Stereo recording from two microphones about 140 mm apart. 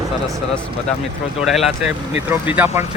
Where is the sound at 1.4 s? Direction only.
Centre (ahead or behind).